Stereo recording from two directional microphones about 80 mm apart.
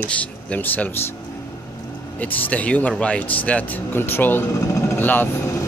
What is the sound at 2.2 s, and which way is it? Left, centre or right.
Speech, centre.